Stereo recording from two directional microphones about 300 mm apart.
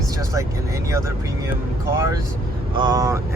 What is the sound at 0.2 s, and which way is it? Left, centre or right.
Speech, centre.